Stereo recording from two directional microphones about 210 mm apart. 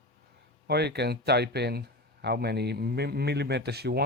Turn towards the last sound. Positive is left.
turn(degrees=-50)  # may be behind; listen again after turning